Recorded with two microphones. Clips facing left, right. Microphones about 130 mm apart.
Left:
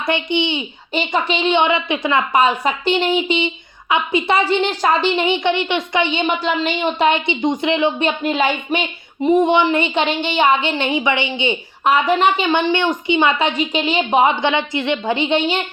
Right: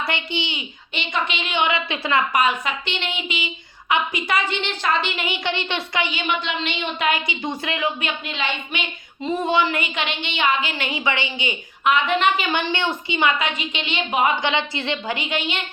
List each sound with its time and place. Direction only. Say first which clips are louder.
0.0 s a woman's voice: left 7 dB; 20° left (ahead or behind)
0.9 s a woman's voice: left 7 dB; 35° left (ahead or behind)
9.2 s a woman's voice: left 7 dB; 20° left (ahead or behind)
11.9 s a woman's voice: left 4 dB; 35° left (ahead or behind)